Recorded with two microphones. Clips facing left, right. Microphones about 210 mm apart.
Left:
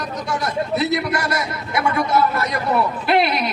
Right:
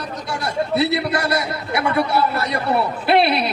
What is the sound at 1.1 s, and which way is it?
Speech, 30° right (ahead or behind).